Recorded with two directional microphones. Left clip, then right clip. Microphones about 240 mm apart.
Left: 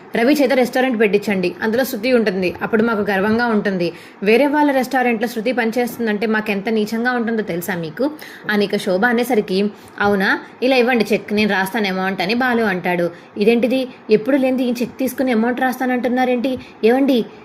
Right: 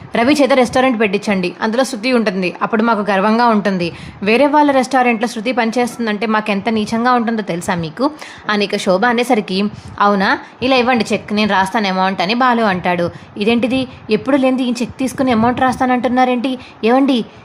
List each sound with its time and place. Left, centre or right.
0.1 s a woman's voice: centre